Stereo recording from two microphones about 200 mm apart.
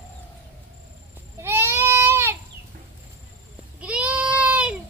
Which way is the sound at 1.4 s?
10° right (ahead or behind).